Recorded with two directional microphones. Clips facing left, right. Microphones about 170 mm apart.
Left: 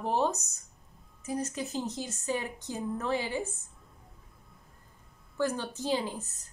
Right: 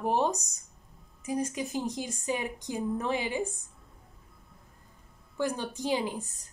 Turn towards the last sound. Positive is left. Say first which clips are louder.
# right 2 dB
turn(degrees=-15)  # may be behind; listen again after turning